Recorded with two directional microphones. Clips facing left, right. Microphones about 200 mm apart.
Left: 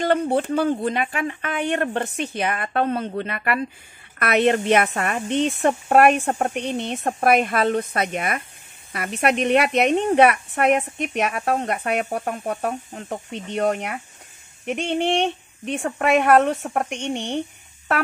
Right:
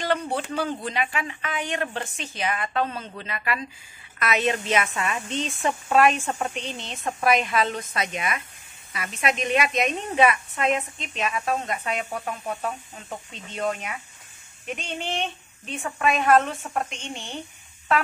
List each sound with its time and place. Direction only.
0.3 s speech: 55° left (ahead or behind)
12.1 s speech: 55° left (ahead or behind); by 17.4 s 70° left (ahead or behind)